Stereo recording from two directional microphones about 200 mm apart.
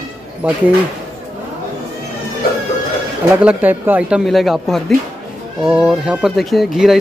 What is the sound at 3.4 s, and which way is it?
Speech, 5° right (ahead or behind).